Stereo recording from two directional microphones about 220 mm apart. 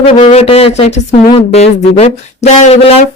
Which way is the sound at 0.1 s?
30° left (ahead or behind).